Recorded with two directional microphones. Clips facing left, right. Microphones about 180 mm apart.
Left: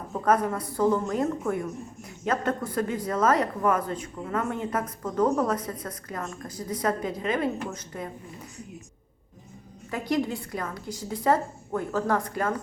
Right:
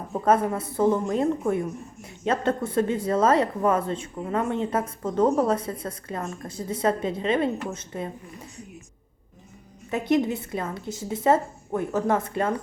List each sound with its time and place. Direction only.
0.1 s speech: 25° right (ahead or behind)
9.9 s speech: 20° right (ahead or behind)